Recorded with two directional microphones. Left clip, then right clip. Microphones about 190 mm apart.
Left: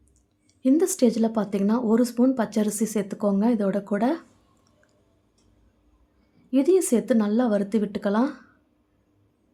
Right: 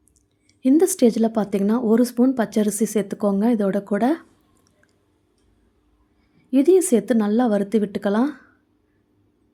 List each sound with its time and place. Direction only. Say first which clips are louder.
0.6 s a woman's voice: right 4 dB; 20° right (ahead or behind)
6.5 s a woman's voice: right 4 dB; 15° right (ahead or behind)